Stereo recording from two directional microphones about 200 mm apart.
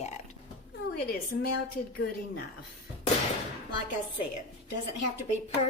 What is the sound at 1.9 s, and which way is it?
Speech, 50° left (ahead or behind).